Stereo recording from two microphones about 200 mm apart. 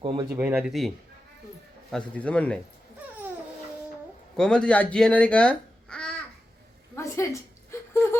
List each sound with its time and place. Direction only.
0.0 s speech: 25° right (ahead or behind)
0.3 s speech: 10° right (ahead or behind)
4.4 s speech: 5° left (ahead or behind)
6.9 s a sound: 15° left (ahead or behind)